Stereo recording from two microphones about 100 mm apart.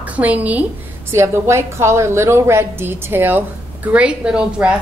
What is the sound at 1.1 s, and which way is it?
A woman's voice, 25° right (ahead or behind).